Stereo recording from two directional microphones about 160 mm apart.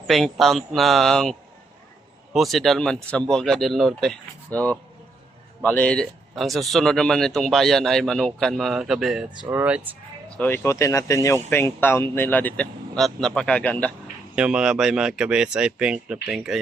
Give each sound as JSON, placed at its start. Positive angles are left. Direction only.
{"t": 0.1, "sound": "speech", "side_deg": 0}
{"t": 10.3, "sound": "speech", "side_deg": 10}
{"t": 14.3, "sound": "speech", "side_deg": -5}